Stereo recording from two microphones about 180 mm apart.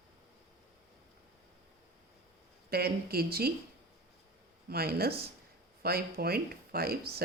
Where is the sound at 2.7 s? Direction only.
60° right (ahead or behind).